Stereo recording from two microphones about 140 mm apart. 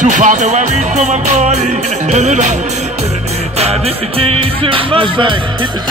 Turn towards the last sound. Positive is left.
turn(degrees=-35)  # may be behind; listen again after turning